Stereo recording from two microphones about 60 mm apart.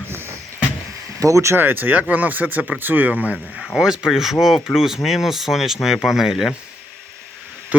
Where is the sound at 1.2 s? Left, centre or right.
Right.